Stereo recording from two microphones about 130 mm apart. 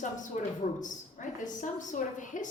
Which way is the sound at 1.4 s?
75° left (ahead or behind).